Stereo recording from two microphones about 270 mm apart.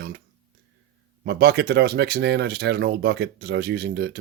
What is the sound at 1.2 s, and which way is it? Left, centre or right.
Speech, right.